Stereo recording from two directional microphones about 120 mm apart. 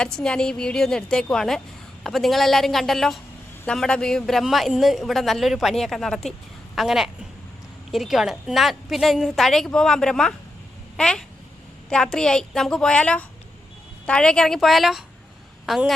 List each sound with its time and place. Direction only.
0.0 s a woman's voice: 5° left (ahead or behind)